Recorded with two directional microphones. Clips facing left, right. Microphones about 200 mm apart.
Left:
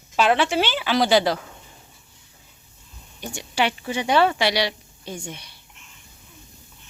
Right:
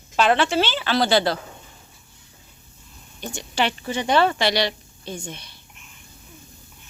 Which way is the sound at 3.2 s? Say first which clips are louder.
Even; 10° left (ahead or behind).